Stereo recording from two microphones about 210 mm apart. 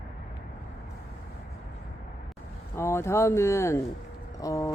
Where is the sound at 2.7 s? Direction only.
10° left (ahead or behind).